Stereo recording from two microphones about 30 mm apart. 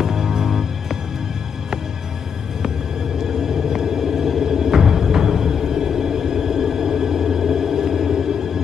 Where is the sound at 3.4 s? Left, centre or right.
Centre.